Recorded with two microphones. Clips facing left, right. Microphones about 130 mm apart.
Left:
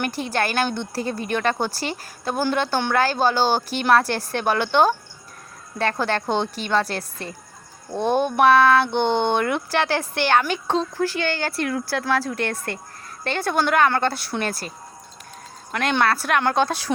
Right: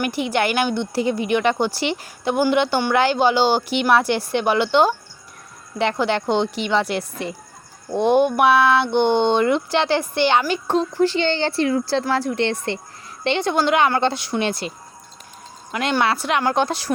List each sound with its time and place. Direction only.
0.0 s speech: 15° right (ahead or behind)
15.7 s speech: 5° right (ahead or behind)